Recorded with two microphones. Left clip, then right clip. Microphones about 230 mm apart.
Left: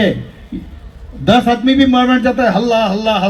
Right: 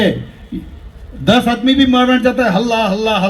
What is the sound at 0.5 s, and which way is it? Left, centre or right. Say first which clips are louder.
A man's voice: right 1 dB; right.